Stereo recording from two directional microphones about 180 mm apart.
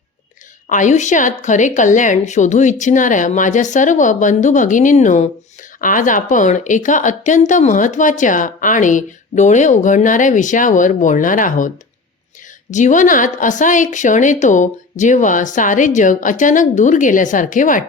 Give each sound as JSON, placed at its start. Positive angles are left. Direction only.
{"t": 0.7, "sound": "a woman's voice", "side_deg": 45}
{"t": 12.7, "sound": "a woman's voice", "side_deg": 45}